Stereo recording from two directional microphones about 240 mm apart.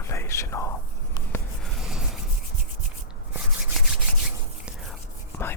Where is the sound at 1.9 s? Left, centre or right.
Centre.